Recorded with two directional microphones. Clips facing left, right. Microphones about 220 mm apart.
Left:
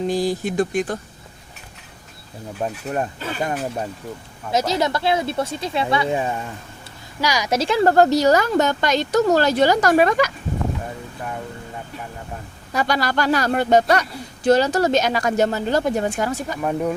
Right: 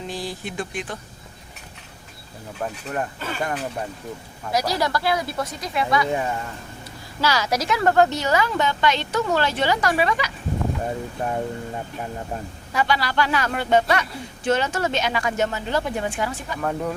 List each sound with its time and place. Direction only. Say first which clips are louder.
0.1 s speech: left 9 dB; 45° left (ahead or behind)
2.6 s speech: left 3 dB; 25° left (ahead or behind)
4.5 s a woman's voice: left 3 dB; 20° left (ahead or behind)
7.6 s speech: left 4 dB; 30° left (ahead or behind); by 10.3 s 45° left (ahead or behind)
11.2 s a sound: right 4 dB; 25° right (ahead or behind)
12.7 s speech: left 2 dB; 40° left (ahead or behind)
16.6 s a woman's voice: left 2 dB; 15° left (ahead or behind)